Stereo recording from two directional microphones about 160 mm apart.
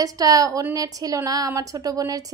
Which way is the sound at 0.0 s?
20° right (ahead or behind).